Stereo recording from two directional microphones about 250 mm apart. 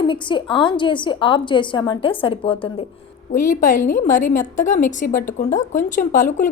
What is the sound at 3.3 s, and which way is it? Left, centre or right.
Speech, left.